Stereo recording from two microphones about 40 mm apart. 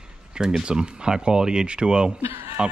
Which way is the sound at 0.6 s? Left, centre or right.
Right.